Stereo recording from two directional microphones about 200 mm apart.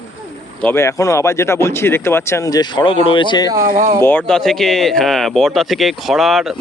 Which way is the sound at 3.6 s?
40° right (ahead or behind).